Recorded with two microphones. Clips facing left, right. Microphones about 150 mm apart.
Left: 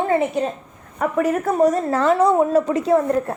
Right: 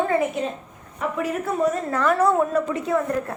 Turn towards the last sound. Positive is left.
turn(degrees=30)  # may be behind; listen again after turning